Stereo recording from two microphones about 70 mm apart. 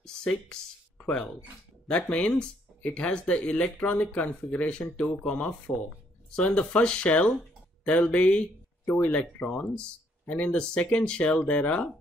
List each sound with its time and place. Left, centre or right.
0.0 s speech: centre